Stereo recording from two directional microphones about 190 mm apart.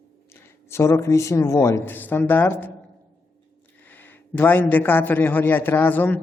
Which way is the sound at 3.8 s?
10° left (ahead or behind).